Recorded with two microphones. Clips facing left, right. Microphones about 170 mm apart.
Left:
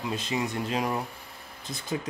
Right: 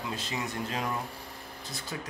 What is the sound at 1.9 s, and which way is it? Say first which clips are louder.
Speech: left 8 dB; 20° left (ahead or behind).